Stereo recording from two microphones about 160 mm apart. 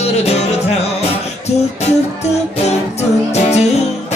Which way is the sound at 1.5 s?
40° left (ahead or behind).